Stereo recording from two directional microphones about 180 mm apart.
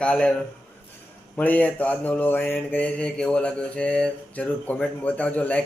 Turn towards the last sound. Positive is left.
turn(degrees=10)  # may be behind; listen again after turning